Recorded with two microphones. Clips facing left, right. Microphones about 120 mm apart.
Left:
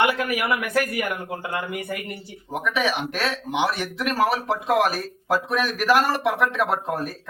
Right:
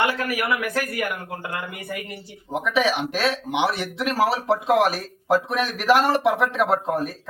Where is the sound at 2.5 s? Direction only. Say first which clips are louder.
Right 2 dB; 25° right (ahead or behind).